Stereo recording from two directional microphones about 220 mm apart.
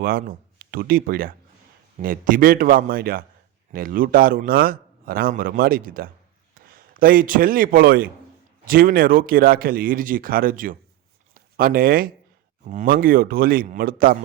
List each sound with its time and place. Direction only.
0.0 s a man's voice: 40° right (ahead or behind)